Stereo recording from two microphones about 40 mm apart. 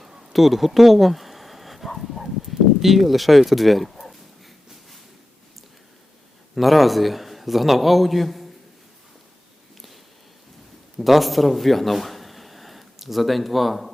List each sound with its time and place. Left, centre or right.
0.0 s a sound: centre
0.3 s a sound: centre
2.5 s speech: centre
4.1 s dog: centre
6.6 s a man's voice: centre
10.9 s a man's voice: centre